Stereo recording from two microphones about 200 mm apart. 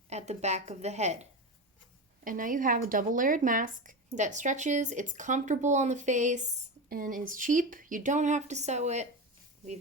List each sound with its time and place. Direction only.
0.1 s speech: 35° right (ahead or behind)